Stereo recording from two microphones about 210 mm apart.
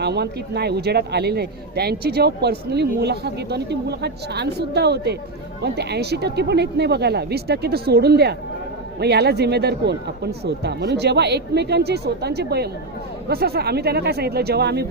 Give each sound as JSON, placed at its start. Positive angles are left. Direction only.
{"t": 0.0, "sound": "speech", "side_deg": -50}